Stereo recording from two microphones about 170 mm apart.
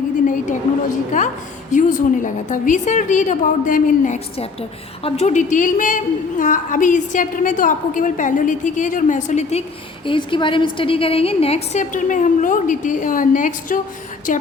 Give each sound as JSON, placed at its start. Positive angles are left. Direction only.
{"t": 1.2, "sound": "a woman's voice", "side_deg": 45}